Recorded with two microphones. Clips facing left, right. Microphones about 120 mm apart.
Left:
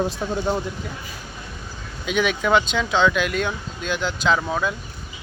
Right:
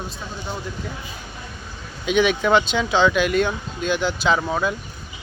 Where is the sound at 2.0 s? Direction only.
Centre (ahead or behind).